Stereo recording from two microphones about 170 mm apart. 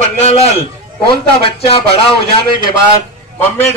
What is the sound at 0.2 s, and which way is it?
Speech, 40° left (ahead or behind).